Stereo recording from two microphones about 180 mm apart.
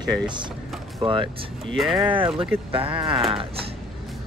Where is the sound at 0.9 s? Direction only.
30° right (ahead or behind).